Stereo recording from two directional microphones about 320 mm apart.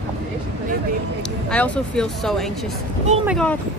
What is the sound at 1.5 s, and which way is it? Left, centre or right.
Speech, centre.